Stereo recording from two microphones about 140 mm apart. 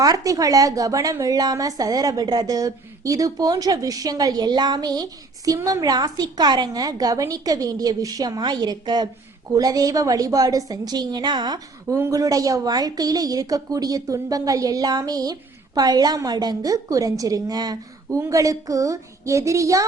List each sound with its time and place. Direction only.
0.0 s a woman's voice: 25° right (ahead or behind)